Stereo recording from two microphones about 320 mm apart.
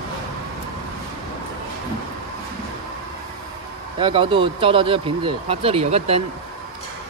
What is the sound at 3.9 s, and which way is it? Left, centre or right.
Speech, centre.